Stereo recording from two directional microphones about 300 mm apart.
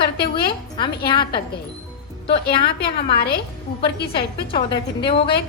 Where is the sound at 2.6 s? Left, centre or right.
Left.